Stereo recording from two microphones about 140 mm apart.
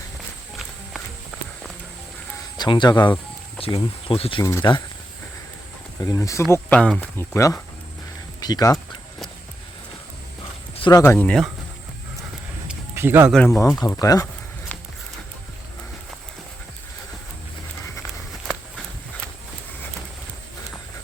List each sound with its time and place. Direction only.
2.6 s speech: 35° left (ahead or behind)
6.0 s speech: 20° left (ahead or behind)
6.7 s speech: 5° left (ahead or behind)
7.2 s speech: 20° left (ahead or behind)
11.0 s speech: 10° left (ahead or behind)
12.9 s speech: 20° right (ahead or behind)
13.3 s speech: 5° left (ahead or behind)
13.8 s speech: 25° left (ahead or behind)